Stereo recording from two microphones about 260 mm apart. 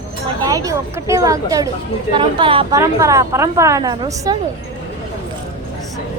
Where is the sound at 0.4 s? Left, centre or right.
Centre.